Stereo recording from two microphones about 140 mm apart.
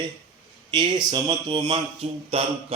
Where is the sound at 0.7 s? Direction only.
35° right (ahead or behind).